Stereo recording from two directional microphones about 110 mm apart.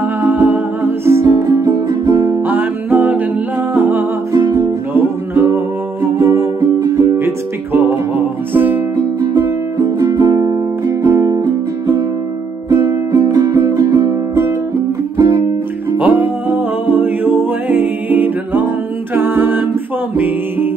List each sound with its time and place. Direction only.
0.2 s music: 15° right (ahead or behind)
2.4 s music: 15° right (ahead or behind)
4.3 s music: 30° right (ahead or behind)
5.3 s music: 20° right (ahead or behind)
8.9 s music: 35° right (ahead or behind)
11.0 s music: 15° right (ahead or behind)
12.6 s music: 35° right (ahead or behind)
15.1 s music: 35° right (ahead or behind)
16.0 s music: 15° right (ahead or behind)